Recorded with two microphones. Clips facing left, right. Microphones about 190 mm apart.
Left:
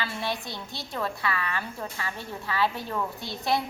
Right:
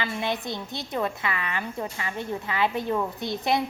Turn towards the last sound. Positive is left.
turn(degrees=-20)  # may be behind; listen again after turning